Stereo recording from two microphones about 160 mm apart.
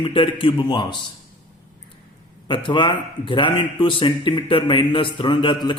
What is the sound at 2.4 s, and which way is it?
Speech, 30° left (ahead or behind).